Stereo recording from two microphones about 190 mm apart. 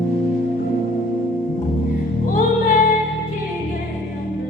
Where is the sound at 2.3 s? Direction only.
45° left (ahead or behind).